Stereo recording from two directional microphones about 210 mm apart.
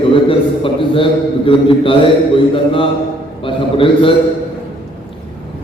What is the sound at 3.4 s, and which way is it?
Speech, 25° left (ahead or behind).